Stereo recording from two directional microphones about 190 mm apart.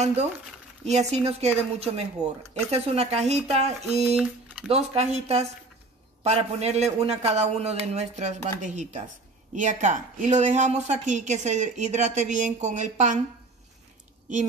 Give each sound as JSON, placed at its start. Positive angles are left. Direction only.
{"t": 0.0, "sound": "speech", "side_deg": -35}